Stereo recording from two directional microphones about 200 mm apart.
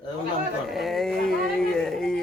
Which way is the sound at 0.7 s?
Centre (ahead or behind).